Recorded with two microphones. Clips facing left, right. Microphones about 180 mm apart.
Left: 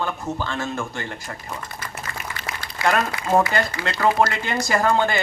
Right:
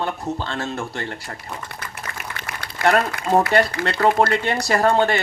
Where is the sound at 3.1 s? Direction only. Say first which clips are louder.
Right 2 dB; 50° right (ahead or behind).